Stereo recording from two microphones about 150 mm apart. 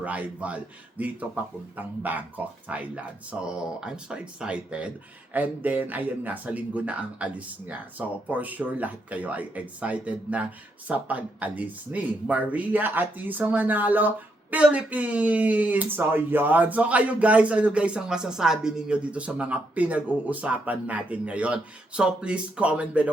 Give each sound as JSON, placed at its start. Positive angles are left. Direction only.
{"t": 0.0, "sound": "speech", "side_deg": -10}